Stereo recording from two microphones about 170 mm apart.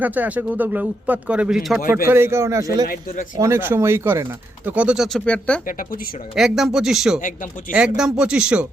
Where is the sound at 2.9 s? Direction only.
60° left (ahead or behind).